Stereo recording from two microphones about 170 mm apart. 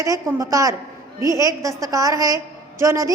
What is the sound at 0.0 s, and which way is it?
A woman's voice, 20° right (ahead or behind).